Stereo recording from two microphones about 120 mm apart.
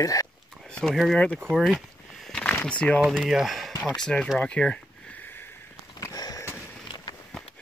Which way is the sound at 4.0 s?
5° left (ahead or behind).